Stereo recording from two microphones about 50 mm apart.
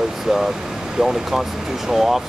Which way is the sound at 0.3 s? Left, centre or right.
Centre.